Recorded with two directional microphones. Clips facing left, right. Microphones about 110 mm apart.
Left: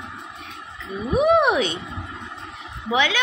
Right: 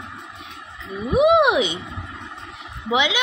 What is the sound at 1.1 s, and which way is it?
Child singing, 10° right (ahead or behind).